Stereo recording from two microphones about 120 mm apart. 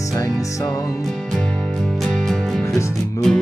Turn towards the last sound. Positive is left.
turn(degrees=0)  # may be behind; listen again after turning